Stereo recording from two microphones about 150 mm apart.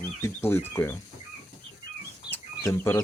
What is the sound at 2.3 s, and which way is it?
Chicken, 15° left (ahead or behind).